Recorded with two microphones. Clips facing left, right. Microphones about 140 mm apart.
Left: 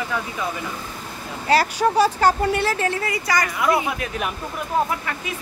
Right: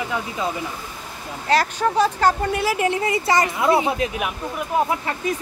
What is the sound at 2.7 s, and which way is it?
A woman's voice, 15° right (ahead or behind).